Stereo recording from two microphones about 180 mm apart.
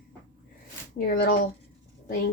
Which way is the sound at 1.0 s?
55° left (ahead or behind).